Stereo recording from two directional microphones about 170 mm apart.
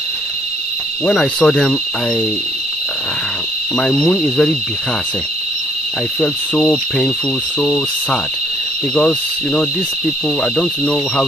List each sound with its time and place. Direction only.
1.0 s speech: 5° left (ahead or behind)
4.0 s speech: 5° left (ahead or behind)
6.2 s speech: 5° left (ahead or behind)